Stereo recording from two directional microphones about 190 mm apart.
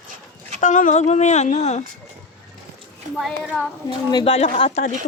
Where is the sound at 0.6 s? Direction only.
40° left (ahead or behind).